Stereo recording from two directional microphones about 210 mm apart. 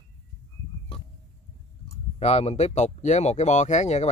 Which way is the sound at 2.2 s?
30° left (ahead or behind).